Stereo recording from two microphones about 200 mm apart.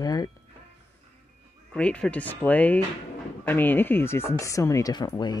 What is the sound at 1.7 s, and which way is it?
Speech, 5° left (ahead or behind).